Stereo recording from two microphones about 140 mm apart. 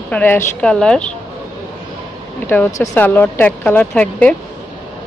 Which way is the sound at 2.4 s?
15° left (ahead or behind).